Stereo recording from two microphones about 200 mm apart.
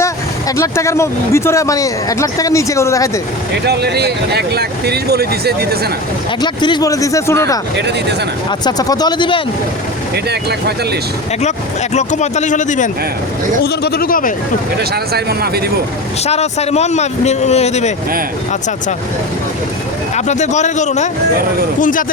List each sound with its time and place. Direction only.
0.0 s speech: 15° left (ahead or behind)
3.5 s speech: 55° right (ahead or behind)
6.4 s speech: 20° left (ahead or behind)
7.8 s speech: 60° right (ahead or behind)
8.4 s speech: 20° left (ahead or behind)
11.9 s speech: 35° left (ahead or behind)
13.6 s speech: 50° left (ahead or behind)
14.8 s speech: 50° right (ahead or behind)
16.2 s speech: 30° left (ahead or behind)
20.1 s speech: 35° left (ahead or behind)